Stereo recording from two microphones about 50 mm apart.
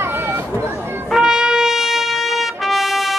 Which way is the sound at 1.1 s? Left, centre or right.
Centre.